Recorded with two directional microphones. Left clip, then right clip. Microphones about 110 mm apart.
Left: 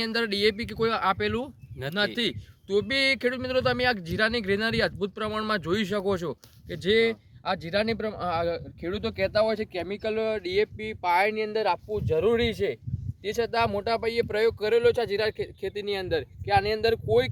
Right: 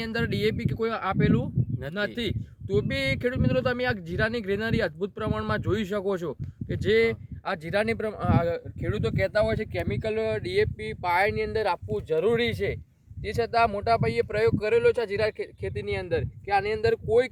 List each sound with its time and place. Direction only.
0.0 s speech: 35° right (ahead or behind)
7.4 s speech: 55° right (ahead or behind); by 12.7 s 5° left (ahead or behind)
13.2 s speech: 15° left (ahead or behind); by 17.2 s 30° left (ahead or behind)